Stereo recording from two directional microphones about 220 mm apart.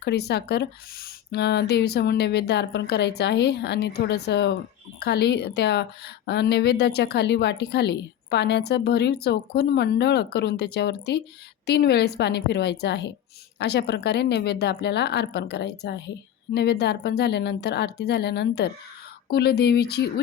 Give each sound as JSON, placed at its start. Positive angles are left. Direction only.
{"t": 0.0, "sound": "a woman's voice", "side_deg": 50}